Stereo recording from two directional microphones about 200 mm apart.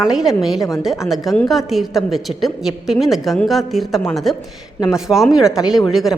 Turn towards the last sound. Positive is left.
turn(degrees=0)  # may be behind; listen again after turning